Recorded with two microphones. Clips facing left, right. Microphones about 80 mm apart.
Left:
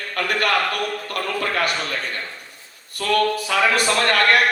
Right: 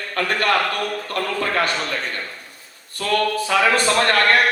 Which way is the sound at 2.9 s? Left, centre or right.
Right.